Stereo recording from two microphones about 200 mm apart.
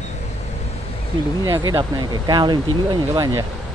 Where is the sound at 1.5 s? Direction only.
20° right (ahead or behind).